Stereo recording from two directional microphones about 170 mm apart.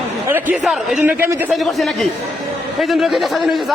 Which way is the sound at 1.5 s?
Centre (ahead or behind).